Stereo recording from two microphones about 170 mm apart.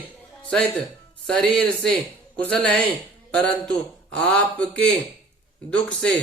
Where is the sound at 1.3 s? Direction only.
5° left (ahead or behind).